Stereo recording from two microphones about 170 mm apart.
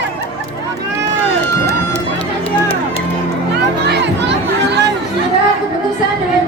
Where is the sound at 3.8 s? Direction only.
90° right.